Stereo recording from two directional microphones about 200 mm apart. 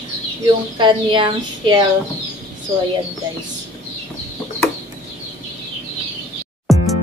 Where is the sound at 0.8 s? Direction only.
25° right (ahead or behind).